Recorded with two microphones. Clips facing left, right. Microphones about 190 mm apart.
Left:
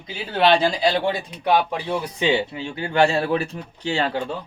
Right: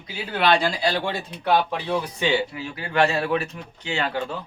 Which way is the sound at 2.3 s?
25° left (ahead or behind).